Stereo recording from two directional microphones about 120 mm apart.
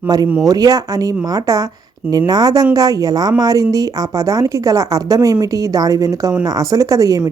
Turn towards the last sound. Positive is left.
turn(degrees=-30)  # may be behind; listen again after turning